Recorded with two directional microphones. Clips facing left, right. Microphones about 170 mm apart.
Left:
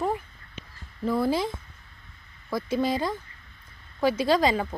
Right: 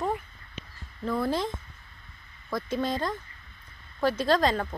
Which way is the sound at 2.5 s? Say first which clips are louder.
Left 3 dB; 5° left (ahead or behind).